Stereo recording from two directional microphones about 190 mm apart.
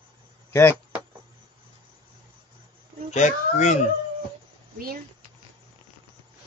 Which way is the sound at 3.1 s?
40° left (ahead or behind).